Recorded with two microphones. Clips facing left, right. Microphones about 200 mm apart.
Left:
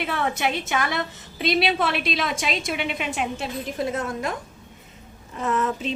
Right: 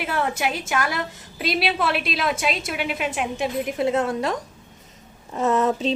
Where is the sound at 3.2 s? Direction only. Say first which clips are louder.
Right 3 dB; 15° right (ahead or behind); by 4.3 s 30° right (ahead or behind).